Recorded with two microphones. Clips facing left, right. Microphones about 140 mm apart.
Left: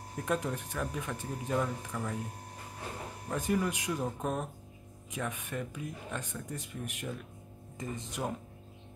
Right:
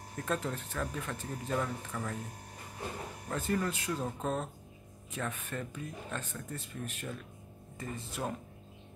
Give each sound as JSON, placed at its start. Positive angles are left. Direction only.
{"t": 0.2, "sound": "speech", "side_deg": 15}
{"t": 3.3, "sound": "speech", "side_deg": 15}